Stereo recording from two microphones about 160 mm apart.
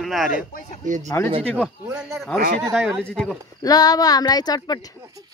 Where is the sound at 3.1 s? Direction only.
5° left (ahead or behind).